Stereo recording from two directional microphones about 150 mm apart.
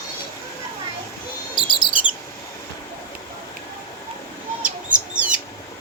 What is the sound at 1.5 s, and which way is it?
Bird, 35° left (ahead or behind).